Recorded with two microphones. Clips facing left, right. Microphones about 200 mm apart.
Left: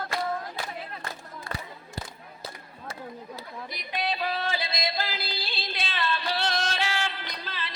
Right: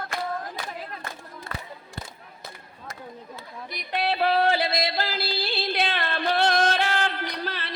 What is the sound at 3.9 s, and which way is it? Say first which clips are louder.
Yodeling: right 7 dB; 60° right (ahead or behind).